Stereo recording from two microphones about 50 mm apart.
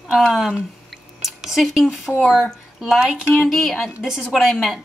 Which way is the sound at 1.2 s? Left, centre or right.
Centre.